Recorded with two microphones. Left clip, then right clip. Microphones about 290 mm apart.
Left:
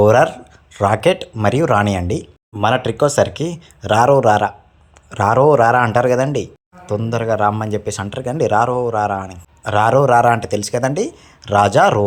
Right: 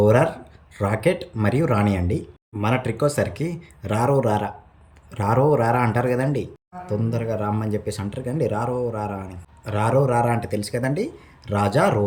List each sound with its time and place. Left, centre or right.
0.0 s speech: centre
3.3 s speech: centre
3.9 s speech: centre